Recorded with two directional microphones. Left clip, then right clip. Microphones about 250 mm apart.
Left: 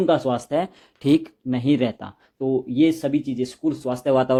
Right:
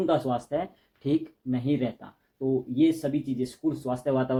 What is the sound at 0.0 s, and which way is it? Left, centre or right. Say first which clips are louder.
Speech: left 6 dB; left.